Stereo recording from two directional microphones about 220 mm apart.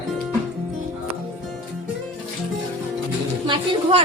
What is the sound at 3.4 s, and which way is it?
Speech, 25° right (ahead or behind).